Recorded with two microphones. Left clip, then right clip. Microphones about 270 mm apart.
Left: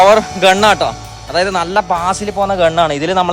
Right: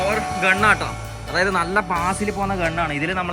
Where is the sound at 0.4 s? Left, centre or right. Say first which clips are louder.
Left 6 dB; centre.